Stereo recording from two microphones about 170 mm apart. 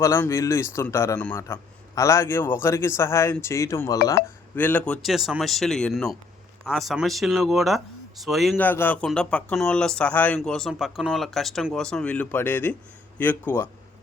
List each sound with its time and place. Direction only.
0.0 s speech: 15° left (ahead or behind)
4.2 s speech: 70° left (ahead or behind)
4.5 s speech: 10° left (ahead or behind)
5.0 s speech: centre (ahead or behind)
8.5 s speech: 10° left (ahead or behind)